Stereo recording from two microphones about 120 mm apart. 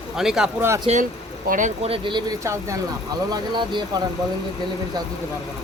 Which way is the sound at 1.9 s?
40° right (ahead or behind).